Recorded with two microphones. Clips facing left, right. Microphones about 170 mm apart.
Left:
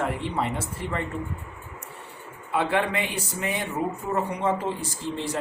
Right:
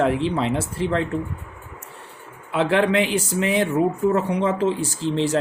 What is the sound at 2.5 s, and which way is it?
Speech, 90° right.